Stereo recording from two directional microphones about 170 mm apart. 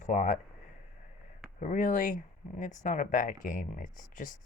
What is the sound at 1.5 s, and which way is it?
Speech, 50° left (ahead or behind).